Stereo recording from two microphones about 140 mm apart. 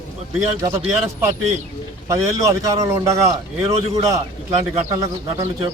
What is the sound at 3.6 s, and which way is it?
Speech, 40° right (ahead or behind).